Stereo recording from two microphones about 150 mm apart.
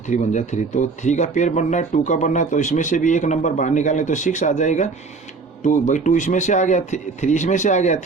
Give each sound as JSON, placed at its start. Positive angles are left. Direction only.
{"t": 0.1, "sound": "speech", "side_deg": 55}